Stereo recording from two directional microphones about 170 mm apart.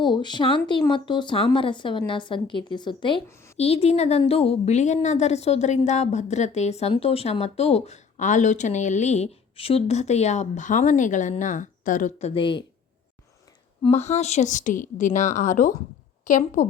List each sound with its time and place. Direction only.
0.0 s a woman's voice: 25° left (ahead or behind); by 12.3 s 50° left (ahead or behind)
12.3 s a woman's voice: 30° left (ahead or behind)
13.8 s a woman's voice: 40° left (ahead or behind)